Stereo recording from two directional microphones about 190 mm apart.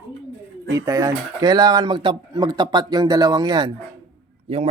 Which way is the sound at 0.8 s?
15° right (ahead or behind).